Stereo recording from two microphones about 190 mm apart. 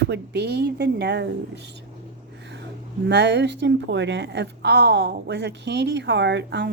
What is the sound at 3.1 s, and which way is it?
A woman's voice, 65° right (ahead or behind).